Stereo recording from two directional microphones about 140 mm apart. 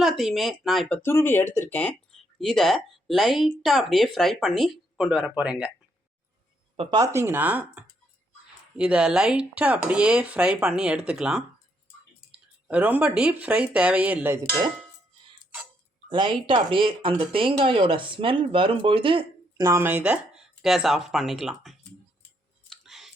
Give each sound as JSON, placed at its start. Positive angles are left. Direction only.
{"t": 0.0, "sound": "speech", "side_deg": 0}
{"t": 1.0, "sound": "speech", "side_deg": 15}
{"t": 6.9, "sound": "speech", "side_deg": -20}
{"t": 16.0, "sound": "speech", "side_deg": -35}
{"t": 19.5, "sound": "speech", "side_deg": -20}
{"t": 22.8, "sound": "a sound", "side_deg": 0}